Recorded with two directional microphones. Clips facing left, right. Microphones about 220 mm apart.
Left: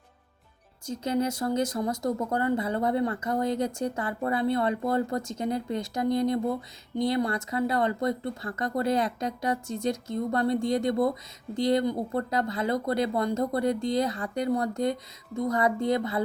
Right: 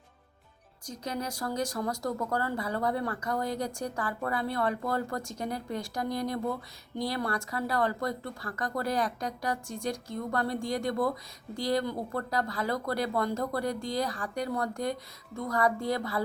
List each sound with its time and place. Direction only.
0.9 s speech: 25° left (ahead or behind)